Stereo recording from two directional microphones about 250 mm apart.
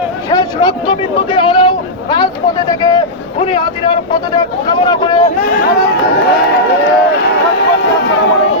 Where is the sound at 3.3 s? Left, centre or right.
Left.